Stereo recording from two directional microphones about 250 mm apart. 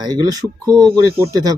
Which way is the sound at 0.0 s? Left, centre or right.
Centre.